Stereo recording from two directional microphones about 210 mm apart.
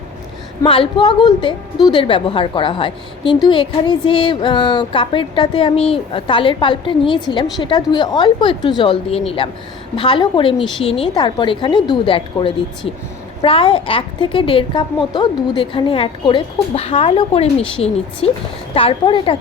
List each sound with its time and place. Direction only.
0.6 s a woman's voice: 25° left (ahead or behind)